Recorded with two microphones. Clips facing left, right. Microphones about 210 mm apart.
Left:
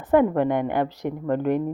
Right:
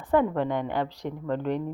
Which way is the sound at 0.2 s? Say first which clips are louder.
Left 5 dB; 55° left (ahead or behind).